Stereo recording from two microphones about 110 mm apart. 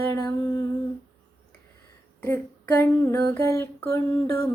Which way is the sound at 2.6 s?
20° left (ahead or behind).